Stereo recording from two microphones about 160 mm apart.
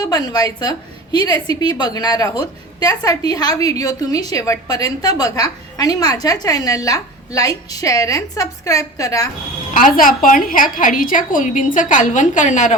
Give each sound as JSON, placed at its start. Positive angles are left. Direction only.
{"t": 0.0, "sound": "a woman's voice", "side_deg": 25}
{"t": 9.7, "sound": "a woman's voice", "side_deg": 60}